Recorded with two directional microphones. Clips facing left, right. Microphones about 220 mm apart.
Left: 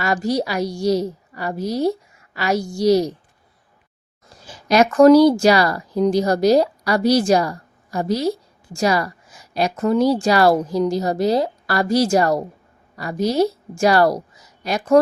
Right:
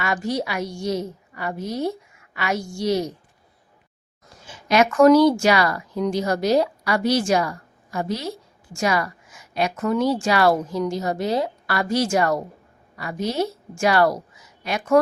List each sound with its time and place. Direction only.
0.0 s a woman's voice: 35° left (ahead or behind)
4.4 s a woman's voice: 35° left (ahead or behind)